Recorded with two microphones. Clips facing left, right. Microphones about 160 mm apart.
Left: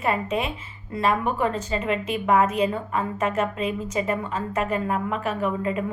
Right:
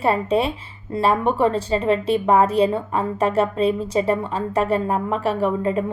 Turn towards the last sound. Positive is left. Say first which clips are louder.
# right 5 dB
turn(degrees=-35)  # may be behind; listen again after turning